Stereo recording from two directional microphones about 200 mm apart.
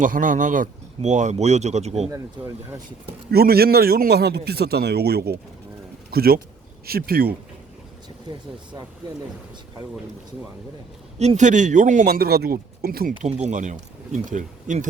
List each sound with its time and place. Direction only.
0.0 s speech: 40° right (ahead or behind)
2.0 s speech: 15° right (ahead or behind)
3.3 s a man's voice: 50° right (ahead or behind)
11.2 s speech: 35° right (ahead or behind)
13.2 s speech: 35° right (ahead or behind)